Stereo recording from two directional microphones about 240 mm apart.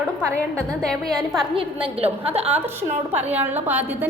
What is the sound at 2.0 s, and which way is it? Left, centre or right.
Speech, right.